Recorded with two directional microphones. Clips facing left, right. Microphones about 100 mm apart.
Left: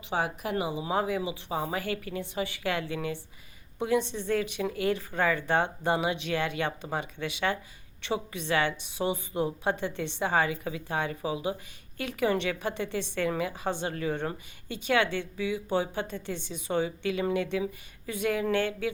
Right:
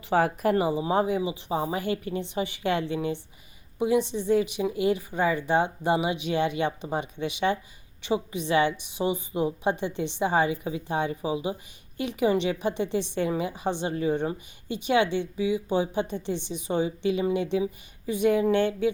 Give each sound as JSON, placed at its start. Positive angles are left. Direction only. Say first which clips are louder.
{"t": 0.1, "sound": "a woman's voice", "louder": "right 7 dB", "side_deg": -45}
{"t": 3.8, "sound": "a woman's voice", "louder": "right 3 dB", "side_deg": -15}